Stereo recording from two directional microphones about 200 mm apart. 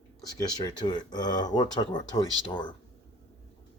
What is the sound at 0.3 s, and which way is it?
Speech, 20° left (ahead or behind).